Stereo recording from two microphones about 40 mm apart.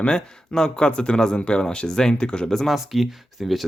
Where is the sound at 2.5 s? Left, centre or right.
Centre.